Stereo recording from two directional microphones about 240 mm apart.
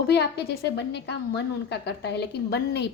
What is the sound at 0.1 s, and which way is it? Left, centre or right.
A woman's voice, left.